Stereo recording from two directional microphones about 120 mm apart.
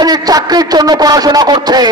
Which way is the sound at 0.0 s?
35° right (ahead or behind).